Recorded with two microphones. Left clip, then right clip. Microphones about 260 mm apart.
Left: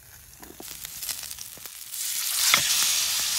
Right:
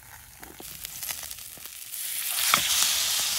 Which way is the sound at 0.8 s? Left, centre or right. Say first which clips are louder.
Left 1 dB; centre.